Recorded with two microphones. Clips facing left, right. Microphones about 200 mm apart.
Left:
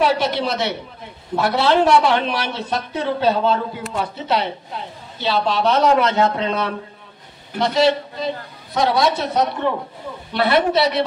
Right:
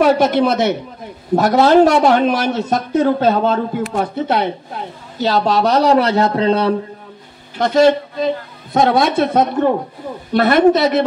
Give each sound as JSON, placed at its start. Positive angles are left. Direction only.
{"t": 0.0, "sound": "speech", "side_deg": -50}
{"t": 7.5, "sound": "speech", "side_deg": -50}